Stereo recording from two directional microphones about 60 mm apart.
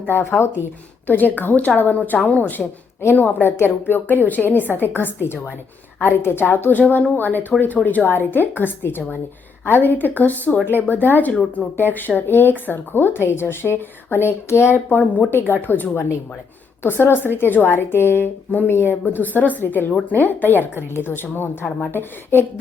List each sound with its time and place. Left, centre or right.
0.1 s a woman's voice: left
1.0 s a woman's voice: left
14.8 s a woman's voice: left